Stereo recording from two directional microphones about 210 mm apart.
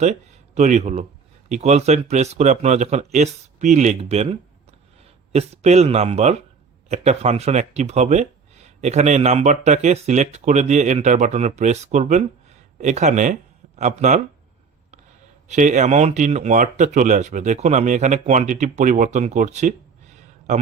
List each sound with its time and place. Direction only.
0.0 s speech: 35° right (ahead or behind)
15.4 s speech: 35° right (ahead or behind)